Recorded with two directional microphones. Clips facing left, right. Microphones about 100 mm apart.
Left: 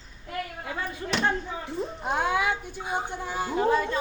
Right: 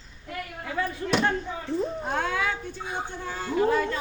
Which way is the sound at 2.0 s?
15° left (ahead or behind).